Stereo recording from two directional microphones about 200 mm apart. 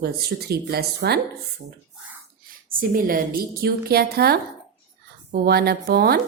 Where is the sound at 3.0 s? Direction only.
45° right (ahead or behind).